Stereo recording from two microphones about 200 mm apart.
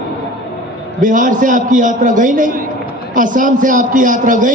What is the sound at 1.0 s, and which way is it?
A man's voice, 40° right (ahead or behind).